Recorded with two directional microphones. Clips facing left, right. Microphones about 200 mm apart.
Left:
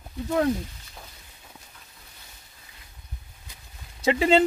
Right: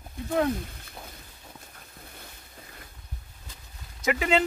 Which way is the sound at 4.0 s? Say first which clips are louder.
Left 5 dB; 30° left (ahead or behind).